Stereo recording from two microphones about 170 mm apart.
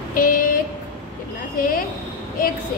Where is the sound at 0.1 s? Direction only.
55° left (ahead or behind).